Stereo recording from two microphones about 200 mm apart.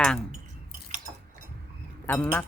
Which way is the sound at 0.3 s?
40° right (ahead or behind).